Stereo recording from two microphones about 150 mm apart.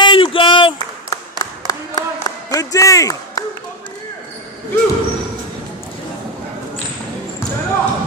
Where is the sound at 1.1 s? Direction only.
25° left (ahead or behind).